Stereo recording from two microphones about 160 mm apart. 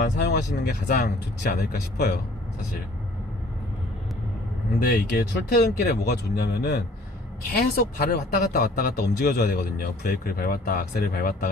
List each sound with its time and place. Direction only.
0.0 s speech: 75° left (ahead or behind)
4.8 s speech: 65° left (ahead or behind)
7.6 s speech: 65° left (ahead or behind)